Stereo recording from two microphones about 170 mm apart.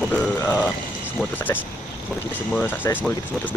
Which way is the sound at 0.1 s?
10° left (ahead or behind).